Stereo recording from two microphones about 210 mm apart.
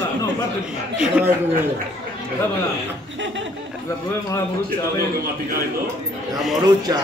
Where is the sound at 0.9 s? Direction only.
5° right (ahead or behind).